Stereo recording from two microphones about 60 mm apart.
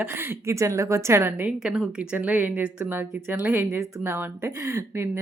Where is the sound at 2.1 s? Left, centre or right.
Right.